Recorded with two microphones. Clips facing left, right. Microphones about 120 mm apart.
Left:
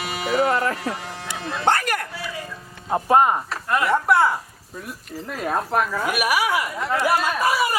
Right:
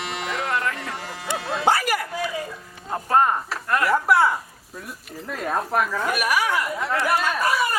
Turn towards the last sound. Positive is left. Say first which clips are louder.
# left 1 dB
turn(degrees=10)  # may be behind; listen again after turning